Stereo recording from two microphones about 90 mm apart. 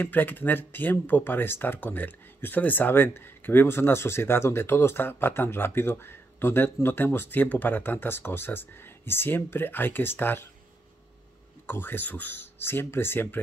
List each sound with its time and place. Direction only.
0.0 s speech: 20° left (ahead or behind)
11.6 s speech: 25° left (ahead or behind)